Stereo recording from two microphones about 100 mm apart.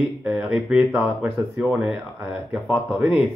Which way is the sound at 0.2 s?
10° right (ahead or behind).